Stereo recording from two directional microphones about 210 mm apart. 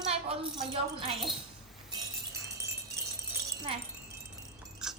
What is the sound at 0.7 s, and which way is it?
Speech, 25° right (ahead or behind).